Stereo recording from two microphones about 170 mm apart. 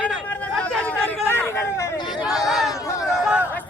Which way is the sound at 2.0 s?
25° left (ahead or behind).